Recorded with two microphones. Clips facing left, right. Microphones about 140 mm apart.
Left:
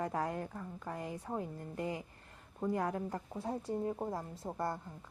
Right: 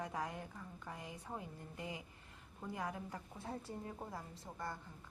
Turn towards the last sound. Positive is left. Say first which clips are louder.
# left 9 dB
turn(degrees=50)  # may be behind; listen again after turning